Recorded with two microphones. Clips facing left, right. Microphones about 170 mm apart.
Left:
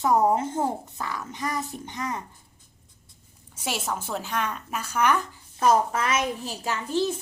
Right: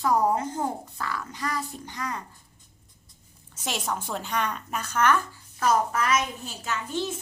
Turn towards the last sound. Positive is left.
turn(degrees=35)  # may be behind; listen again after turning